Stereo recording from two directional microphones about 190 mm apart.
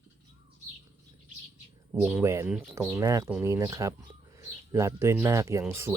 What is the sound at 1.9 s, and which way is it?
Speech, 10° right (ahead or behind).